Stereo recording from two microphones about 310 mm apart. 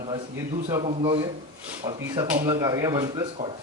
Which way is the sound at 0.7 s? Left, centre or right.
Centre.